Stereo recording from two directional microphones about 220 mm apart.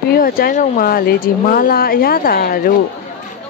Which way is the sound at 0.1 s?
40° left (ahead or behind).